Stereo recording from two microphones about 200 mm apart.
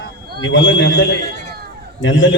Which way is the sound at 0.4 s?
70° left (ahead or behind).